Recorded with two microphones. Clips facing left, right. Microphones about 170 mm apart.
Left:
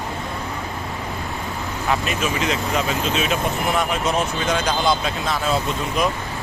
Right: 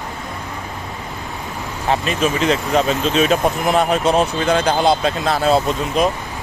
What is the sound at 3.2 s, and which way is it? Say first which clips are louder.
Speech: right 6 dB; 35° right (ahead or behind).